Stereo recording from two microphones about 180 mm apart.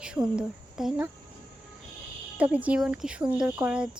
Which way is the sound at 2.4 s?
10° right (ahead or behind).